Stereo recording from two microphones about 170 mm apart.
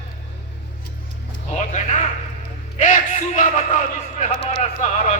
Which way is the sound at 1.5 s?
40° left (ahead or behind).